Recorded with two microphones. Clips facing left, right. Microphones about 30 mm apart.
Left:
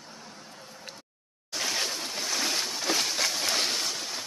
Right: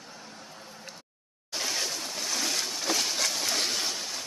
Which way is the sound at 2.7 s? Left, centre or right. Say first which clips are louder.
Left 1 dB; centre.